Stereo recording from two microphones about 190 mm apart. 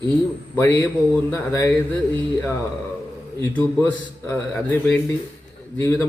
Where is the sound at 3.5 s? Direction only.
10° left (ahead or behind).